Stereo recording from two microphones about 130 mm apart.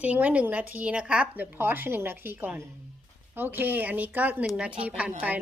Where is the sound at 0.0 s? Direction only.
10° right (ahead or behind).